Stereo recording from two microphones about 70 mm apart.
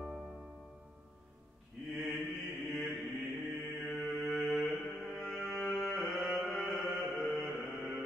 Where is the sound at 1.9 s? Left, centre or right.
Centre.